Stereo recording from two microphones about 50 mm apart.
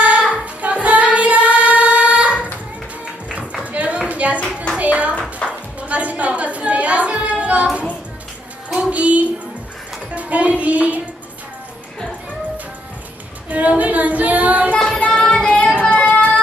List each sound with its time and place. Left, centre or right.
0.3 s singing: right
2.2 s a sound: right
4.7 s clapping: right
5.5 s music: right
8.8 s music: right
13.5 s female singing: right
14.8 s child singing: centre
15.1 s music: centre
15.4 s child singing: left